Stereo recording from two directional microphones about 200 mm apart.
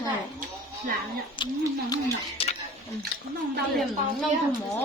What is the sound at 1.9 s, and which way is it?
Speech, 30° left (ahead or behind).